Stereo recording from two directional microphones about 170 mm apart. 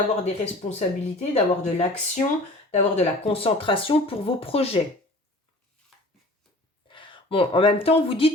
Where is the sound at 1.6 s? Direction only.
45° left (ahead or behind).